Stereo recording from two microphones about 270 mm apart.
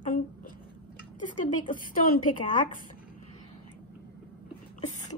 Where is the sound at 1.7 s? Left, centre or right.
Left.